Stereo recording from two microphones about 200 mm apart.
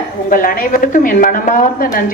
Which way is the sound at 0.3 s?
45° left (ahead or behind).